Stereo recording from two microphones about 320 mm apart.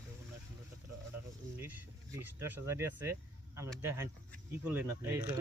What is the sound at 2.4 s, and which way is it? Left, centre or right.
Speech, centre.